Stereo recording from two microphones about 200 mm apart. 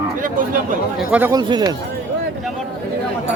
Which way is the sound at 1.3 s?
20° right (ahead or behind).